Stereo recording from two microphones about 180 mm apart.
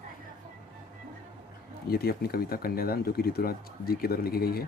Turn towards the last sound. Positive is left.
turn(degrees=60)  # may be behind; listen again after turning